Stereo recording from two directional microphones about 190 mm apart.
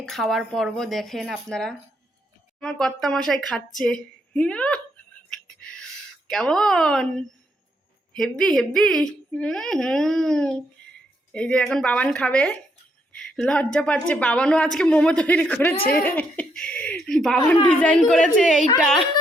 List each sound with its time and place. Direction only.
0.0 s a woman's voice: centre (ahead or behind)
5.3 s a sound: 5° left (ahead or behind)
8.1 s a woman's voice: 5° left (ahead or behind)
15.8 s speech: 50° left (ahead or behind)
16.0 s a woman's voice: 10° left (ahead or behind)